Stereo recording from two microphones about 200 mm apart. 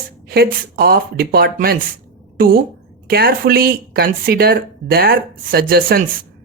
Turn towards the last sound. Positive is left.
turn(degrees=-45)  # may be behind; listen again after turning